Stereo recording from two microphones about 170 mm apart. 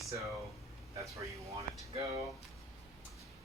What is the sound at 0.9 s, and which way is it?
Speech, 20° right (ahead or behind).